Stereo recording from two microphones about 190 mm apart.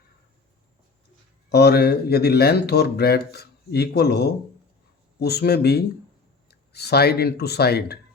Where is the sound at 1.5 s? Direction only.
60° left (ahead or behind).